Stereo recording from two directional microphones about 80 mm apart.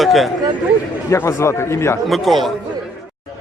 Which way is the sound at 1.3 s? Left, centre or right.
Left.